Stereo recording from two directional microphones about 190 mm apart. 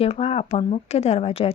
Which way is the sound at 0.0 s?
30° left (ahead or behind).